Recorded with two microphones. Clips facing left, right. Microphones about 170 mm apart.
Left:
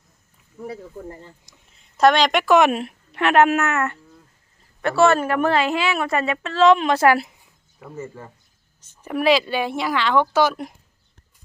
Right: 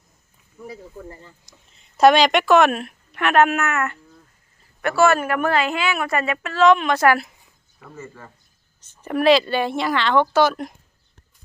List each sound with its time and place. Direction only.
0.7 s speech: 30° left (ahead or behind)
2.0 s a woman's voice: 5° right (ahead or behind)
2.5 s a woman's voice: 15° left (ahead or behind)
5.5 s a woman's voice: centre (ahead or behind)
6.4 s a woman's voice: 25° left (ahead or behind)
8.8 s speech: 5° left (ahead or behind)